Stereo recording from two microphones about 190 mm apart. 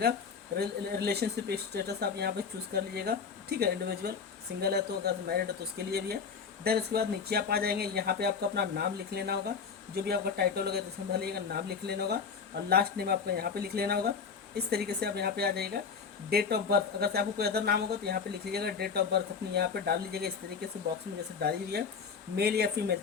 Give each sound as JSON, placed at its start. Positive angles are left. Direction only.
{"t": 0.6, "sound": "speech", "side_deg": -60}
{"t": 21.4, "sound": "speech", "side_deg": -55}